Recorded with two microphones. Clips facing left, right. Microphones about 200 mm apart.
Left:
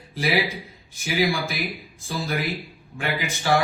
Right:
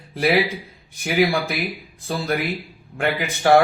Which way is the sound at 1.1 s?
60° right (ahead or behind).